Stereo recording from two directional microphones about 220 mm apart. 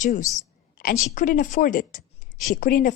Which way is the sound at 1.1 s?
35° left (ahead or behind).